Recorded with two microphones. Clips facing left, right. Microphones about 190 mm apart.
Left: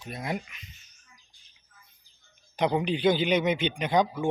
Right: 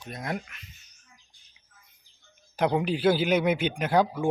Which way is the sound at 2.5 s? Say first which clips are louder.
Right 1 dB; centre (ahead or behind).